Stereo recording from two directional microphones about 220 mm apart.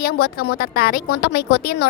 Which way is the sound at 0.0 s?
45° left (ahead or behind).